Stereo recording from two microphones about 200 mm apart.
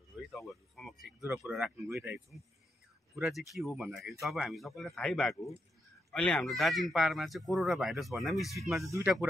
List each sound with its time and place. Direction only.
0.3 s speech: centre (ahead or behind)
3.2 s speech: centre (ahead or behind)
8.8 s speech: 15° right (ahead or behind)